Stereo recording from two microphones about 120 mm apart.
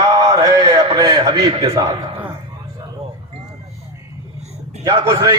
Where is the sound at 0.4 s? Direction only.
35° right (ahead or behind).